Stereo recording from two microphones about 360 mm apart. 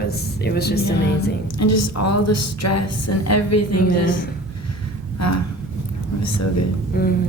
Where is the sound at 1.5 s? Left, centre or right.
Left.